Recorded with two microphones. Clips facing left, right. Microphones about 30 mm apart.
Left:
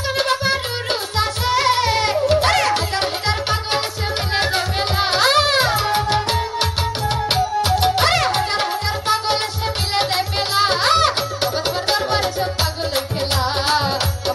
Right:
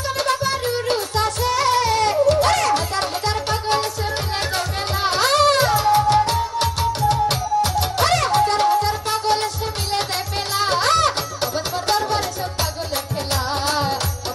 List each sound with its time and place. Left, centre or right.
0.2 s music: left